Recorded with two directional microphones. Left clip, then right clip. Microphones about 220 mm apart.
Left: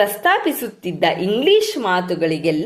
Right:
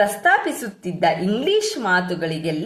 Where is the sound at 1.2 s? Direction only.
20° left (ahead or behind).